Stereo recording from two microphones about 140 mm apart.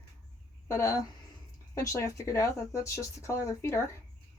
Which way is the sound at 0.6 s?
20° left (ahead or behind).